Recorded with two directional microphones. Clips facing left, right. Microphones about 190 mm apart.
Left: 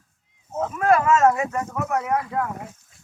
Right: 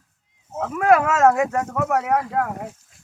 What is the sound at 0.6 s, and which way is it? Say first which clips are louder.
Speech: right 2 dB; 90° right.